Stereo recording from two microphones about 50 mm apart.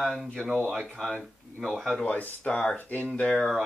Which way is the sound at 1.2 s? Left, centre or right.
Centre.